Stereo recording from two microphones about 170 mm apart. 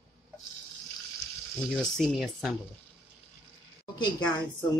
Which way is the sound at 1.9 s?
Centre (ahead or behind).